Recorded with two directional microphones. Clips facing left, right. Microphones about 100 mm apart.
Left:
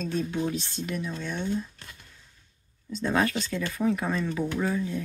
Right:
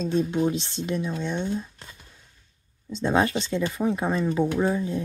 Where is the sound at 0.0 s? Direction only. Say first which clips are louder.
Right 5 dB; 20° right (ahead or behind).